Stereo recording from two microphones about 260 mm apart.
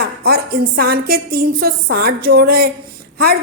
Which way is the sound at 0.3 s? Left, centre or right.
Right.